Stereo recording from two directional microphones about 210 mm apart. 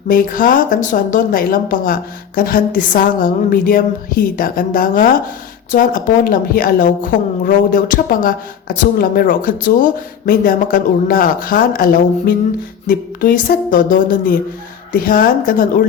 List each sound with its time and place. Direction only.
0.1 s a woman's voice: 40° left (ahead or behind)